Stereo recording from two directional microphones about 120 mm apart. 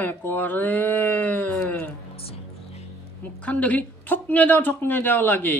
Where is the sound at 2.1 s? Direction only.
55° left (ahead or behind).